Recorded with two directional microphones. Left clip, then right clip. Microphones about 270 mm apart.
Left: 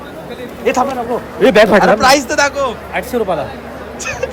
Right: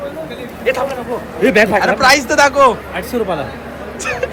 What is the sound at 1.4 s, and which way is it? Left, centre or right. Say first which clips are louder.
Speech: left 3 dB; left.